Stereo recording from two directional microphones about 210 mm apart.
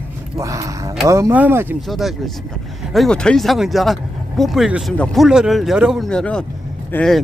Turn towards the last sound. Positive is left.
turn(degrees=5)  # may be behind; listen again after turning